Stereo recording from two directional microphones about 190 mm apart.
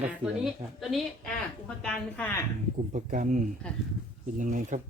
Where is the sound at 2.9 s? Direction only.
45° right (ahead or behind).